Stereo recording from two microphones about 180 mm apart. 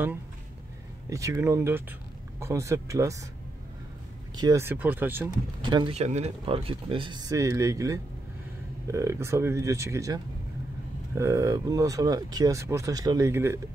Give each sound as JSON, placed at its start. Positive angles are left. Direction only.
{"t": 1.1, "sound": "speech", "side_deg": -15}
{"t": 4.4, "sound": "speech", "side_deg": -15}
{"t": 5.6, "sound": "speech", "side_deg": -25}
{"t": 5.9, "sound": "speech", "side_deg": -35}